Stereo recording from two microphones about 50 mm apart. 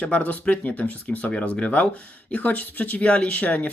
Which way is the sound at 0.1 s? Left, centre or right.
Left.